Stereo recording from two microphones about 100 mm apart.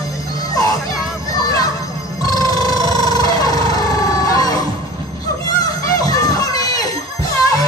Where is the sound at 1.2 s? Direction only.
35° left (ahead or behind).